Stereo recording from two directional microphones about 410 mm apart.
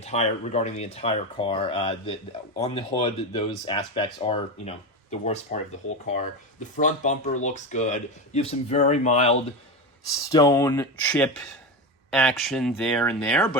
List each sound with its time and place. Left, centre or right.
0.0 s speech: centre
10.3 s speech: centre